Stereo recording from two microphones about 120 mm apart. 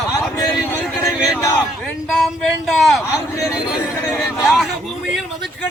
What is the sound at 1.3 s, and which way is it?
Speech, 15° left (ahead or behind).